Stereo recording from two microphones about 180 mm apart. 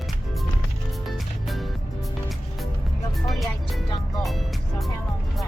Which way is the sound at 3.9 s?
20° left (ahead or behind).